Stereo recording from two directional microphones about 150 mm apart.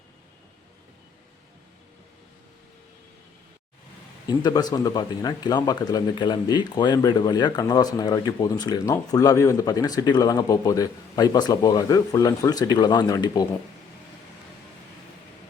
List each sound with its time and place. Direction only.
4.3 s speech: 25° left (ahead or behind)